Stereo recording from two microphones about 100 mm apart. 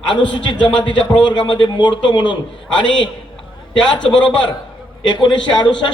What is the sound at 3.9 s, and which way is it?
A man's voice, 55° left (ahead or behind).